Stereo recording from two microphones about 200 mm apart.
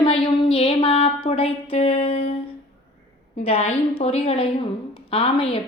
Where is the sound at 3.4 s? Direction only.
30° left (ahead or behind).